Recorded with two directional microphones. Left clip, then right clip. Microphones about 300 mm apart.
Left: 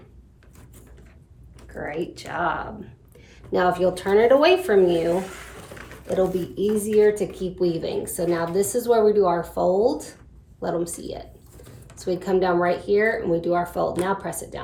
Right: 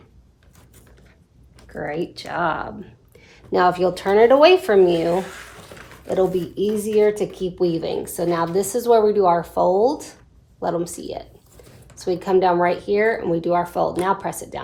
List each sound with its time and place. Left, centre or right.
1.7 s a woman's voice: right
6.2 s speech: centre
6.6 s a woman's voice: centre